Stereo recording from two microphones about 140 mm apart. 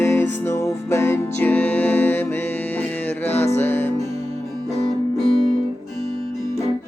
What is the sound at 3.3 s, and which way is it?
Music, 15° left (ahead or behind).